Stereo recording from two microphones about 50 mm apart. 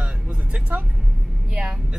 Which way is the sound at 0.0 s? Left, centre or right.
Right.